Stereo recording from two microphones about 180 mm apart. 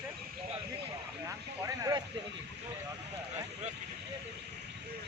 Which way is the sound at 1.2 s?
15° right (ahead or behind).